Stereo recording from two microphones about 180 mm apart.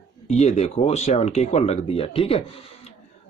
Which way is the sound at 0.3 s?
40° left (ahead or behind).